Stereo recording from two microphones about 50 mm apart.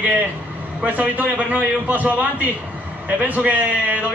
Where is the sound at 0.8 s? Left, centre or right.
Right.